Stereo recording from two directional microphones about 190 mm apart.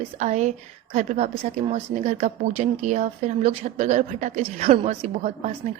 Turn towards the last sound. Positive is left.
turn(degrees=-35)  # may be behind; listen again after turning